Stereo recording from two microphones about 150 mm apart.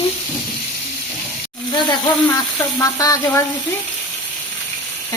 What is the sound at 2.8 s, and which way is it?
Speech, 20° left (ahead or behind).